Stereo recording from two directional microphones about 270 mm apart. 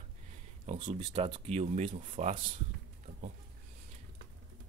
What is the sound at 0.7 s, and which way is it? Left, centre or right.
Speech, right.